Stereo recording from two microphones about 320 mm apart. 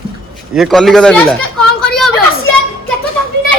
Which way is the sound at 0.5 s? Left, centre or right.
Centre.